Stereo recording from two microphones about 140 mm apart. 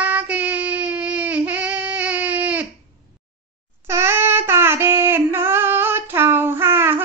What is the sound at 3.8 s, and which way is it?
Child singing, 20° right (ahead or behind).